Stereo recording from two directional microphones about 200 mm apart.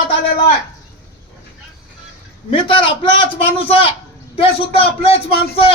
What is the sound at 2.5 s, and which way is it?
Speech, 25° left (ahead or behind).